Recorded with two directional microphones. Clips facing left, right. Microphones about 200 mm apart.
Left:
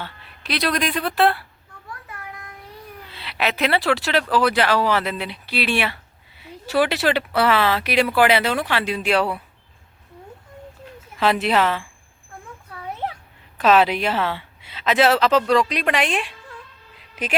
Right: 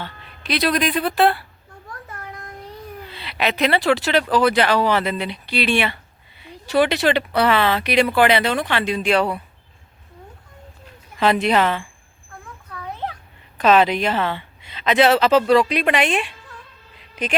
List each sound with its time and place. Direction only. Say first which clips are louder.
0.0 s speech: right 2 dB; centre (ahead or behind)
2.0 s child singing: right 2 dB; 45° right (ahead or behind)
3.1 s speech: right 1 dB; centre (ahead or behind)
11.2 s speech: right 2 dB; centre (ahead or behind)
13.6 s speech: right 1 dB; 5° left (ahead or behind)